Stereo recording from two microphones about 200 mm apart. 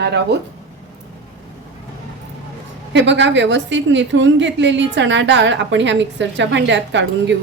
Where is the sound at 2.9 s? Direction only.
65° right (ahead or behind).